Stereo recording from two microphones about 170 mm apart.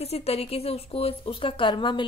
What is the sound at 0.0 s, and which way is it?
A woman's voice, 35° left (ahead or behind).